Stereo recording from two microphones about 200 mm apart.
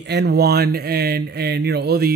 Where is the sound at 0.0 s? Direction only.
55° right (ahead or behind).